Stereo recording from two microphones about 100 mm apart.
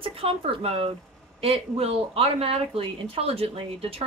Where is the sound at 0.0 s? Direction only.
70° right (ahead or behind).